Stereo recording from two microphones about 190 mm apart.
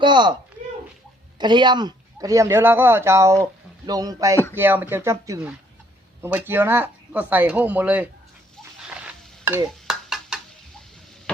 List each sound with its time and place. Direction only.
0.0 s speech: 25° right (ahead or behind)
1.4 s speech: 25° right (ahead or behind)
8.9 s stir: 10° right (ahead or behind)
9.9 s a sound: centre (ahead or behind)